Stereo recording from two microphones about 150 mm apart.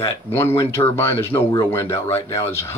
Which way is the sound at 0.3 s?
15° left (ahead or behind).